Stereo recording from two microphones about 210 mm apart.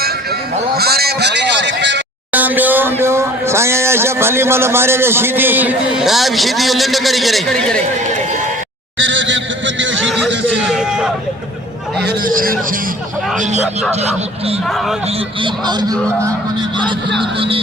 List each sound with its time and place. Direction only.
0.0 s a sound: 50° right (ahead or behind)
2.3 s speech: 10° right (ahead or behind)
9.2 s a sound: 60° right (ahead or behind)
10.6 s speech: centre (ahead or behind)
12.0 s a man's voice: 40° right (ahead or behind)
14.7 s speech: centre (ahead or behind)
15.0 s speech: 25° right (ahead or behind)